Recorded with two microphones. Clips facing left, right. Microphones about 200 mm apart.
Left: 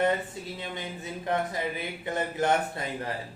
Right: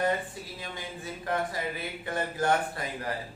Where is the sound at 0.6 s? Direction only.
20° left (ahead or behind).